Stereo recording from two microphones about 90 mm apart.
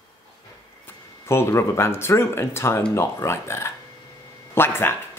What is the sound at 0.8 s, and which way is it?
Speech, 30° left (ahead or behind).